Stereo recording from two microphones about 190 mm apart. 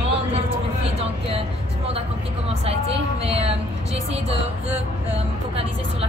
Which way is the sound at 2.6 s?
30° right (ahead or behind).